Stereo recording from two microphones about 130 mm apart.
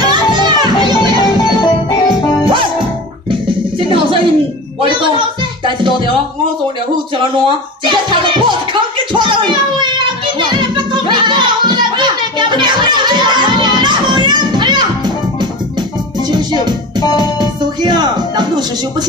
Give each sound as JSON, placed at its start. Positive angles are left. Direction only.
{"t": 0.4, "sound": "music", "side_deg": -35}
{"t": 3.3, "sound": "music", "side_deg": -40}
{"t": 7.4, "sound": "music", "side_deg": -35}
{"t": 16.3, "sound": "music", "side_deg": -35}